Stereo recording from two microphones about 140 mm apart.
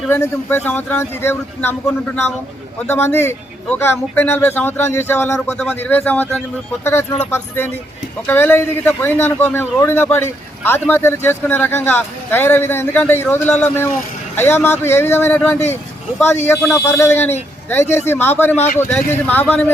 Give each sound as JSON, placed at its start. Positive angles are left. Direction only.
{"t": 0.1, "sound": "a man's voice", "side_deg": 15}